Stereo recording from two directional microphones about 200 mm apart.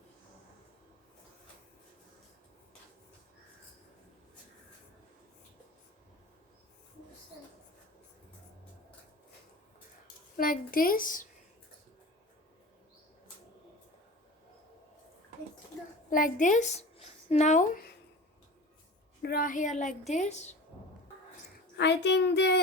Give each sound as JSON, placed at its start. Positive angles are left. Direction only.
{"t": 10.3, "sound": "a woman's voice", "side_deg": 45}
{"t": 16.0, "sound": "a woman's voice", "side_deg": 45}
{"t": 19.2, "sound": "a woman's voice", "side_deg": 45}
{"t": 21.8, "sound": "speech", "side_deg": 60}